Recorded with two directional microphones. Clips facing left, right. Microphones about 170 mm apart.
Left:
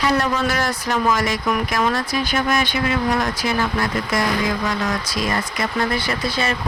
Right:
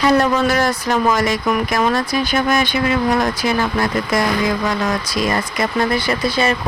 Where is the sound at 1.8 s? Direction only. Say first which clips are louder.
Right 3 dB; 45° right (ahead or behind).